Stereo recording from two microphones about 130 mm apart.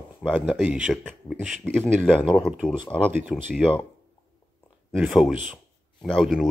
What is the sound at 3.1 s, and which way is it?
Speech, 10° right (ahead or behind).